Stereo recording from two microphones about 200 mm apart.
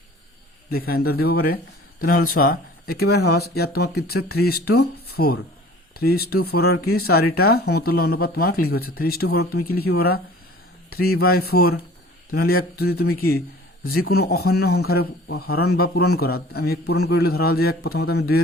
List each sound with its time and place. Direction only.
0.7 s a man's voice: 50° left (ahead or behind)